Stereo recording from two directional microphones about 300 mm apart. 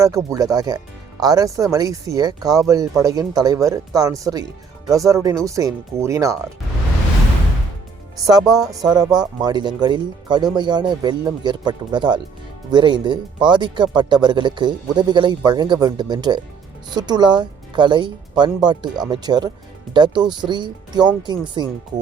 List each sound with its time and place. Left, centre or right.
0.0 s speech: centre
8.3 s speech: centre